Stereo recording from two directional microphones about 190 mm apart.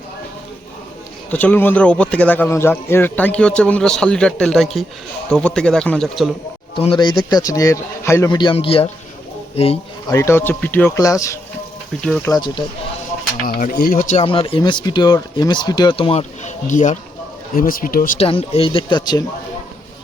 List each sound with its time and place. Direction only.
1.3 s speech: 10° left (ahead or behind)
6.7 s speech: 25° left (ahead or behind)
10.1 s speech: 15° left (ahead or behind)
12.0 s speech: 5° left (ahead or behind)
12.3 s speech: 25° left (ahead or behind)
13.4 s speech: 45° left (ahead or behind)
14.3 s speech: 30° left (ahead or behind); by 18.2 s 45° left (ahead or behind)
18.2 s speech: 30° left (ahead or behind)